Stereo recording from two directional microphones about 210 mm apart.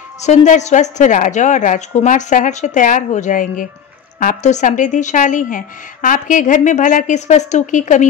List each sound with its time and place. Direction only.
0.2 s a woman's voice: 35° left (ahead or behind)